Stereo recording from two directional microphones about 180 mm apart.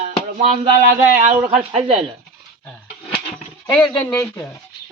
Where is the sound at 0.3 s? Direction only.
40° right (ahead or behind).